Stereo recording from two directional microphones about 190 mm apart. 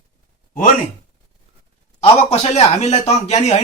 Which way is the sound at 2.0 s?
35° left (ahead or behind).